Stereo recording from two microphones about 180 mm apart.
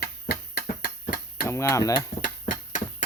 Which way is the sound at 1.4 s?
15° left (ahead or behind).